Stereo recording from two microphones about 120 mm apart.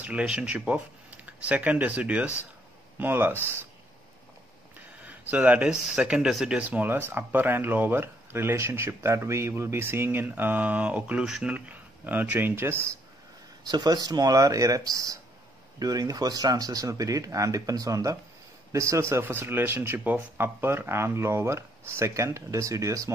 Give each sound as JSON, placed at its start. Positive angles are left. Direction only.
{"t": 0.0, "sound": "speech", "side_deg": -10}
{"t": 5.0, "sound": "speech", "side_deg": -15}
{"t": 13.7, "sound": "speech", "side_deg": -35}